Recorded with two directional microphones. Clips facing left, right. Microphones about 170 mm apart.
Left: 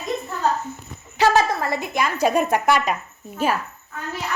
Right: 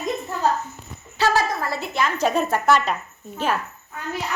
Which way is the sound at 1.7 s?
15° left (ahead or behind).